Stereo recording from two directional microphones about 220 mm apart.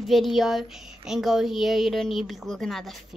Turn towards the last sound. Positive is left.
turn(degrees=0)  # may be behind; listen again after turning